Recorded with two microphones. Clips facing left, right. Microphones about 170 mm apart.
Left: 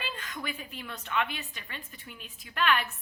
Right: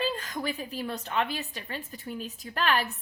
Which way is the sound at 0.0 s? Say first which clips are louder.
Right 8 dB; 40° right (ahead or behind).